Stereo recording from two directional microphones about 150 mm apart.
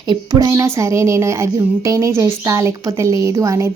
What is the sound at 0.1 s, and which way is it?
Speech, 25° right (ahead or behind).